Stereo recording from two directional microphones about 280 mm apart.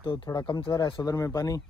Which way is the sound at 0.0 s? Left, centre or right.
Centre.